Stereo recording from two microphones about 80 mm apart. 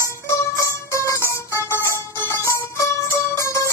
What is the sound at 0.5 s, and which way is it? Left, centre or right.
Music, left.